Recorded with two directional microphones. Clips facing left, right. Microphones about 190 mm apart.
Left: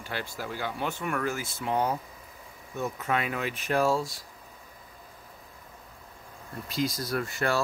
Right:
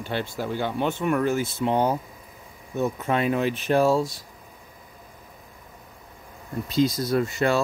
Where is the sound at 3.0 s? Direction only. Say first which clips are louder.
Right 6 dB; 30° right (ahead or behind).